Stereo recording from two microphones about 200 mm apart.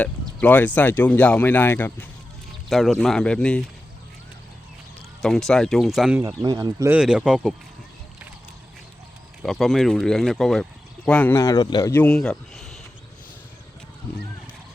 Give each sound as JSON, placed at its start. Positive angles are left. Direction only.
{"t": 0.0, "sound": "speech", "side_deg": 10}
{"t": 5.2, "sound": "speech", "side_deg": 0}
{"t": 6.2, "sound": "speech", "side_deg": -20}
{"t": 6.9, "sound": "speech", "side_deg": -5}
{"t": 9.4, "sound": "speech", "side_deg": 0}